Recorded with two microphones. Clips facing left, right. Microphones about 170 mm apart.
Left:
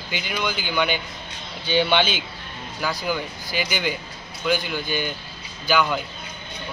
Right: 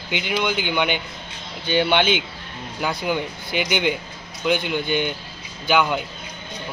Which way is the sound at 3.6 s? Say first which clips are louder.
Right 4 dB; 65° right (ahead or behind).